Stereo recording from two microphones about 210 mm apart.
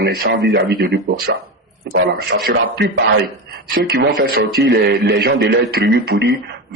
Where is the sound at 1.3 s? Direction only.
60° right (ahead or behind).